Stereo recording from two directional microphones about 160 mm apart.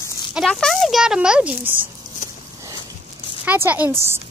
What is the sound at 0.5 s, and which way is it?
A child's voice, 5° left (ahead or behind).